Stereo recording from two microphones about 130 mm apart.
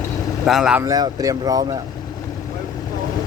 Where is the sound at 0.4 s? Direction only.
5° right (ahead or behind).